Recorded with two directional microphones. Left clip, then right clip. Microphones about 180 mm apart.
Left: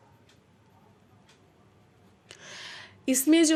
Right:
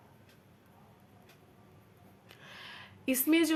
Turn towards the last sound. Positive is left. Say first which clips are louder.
# left 6 dB
turn(degrees=35)  # may be behind; listen again after turning